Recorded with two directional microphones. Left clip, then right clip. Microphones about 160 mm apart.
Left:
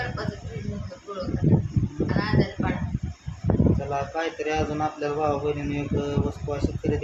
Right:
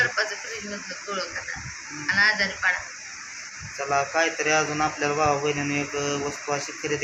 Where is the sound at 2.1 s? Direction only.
30° left (ahead or behind).